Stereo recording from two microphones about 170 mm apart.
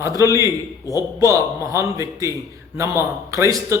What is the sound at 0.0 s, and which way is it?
A man's voice, 20° right (ahead or behind).